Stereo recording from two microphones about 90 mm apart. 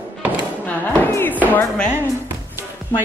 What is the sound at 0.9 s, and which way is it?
Music, 25° left (ahead or behind).